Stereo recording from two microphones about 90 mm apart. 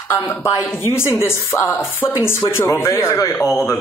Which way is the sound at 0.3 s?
30° left (ahead or behind).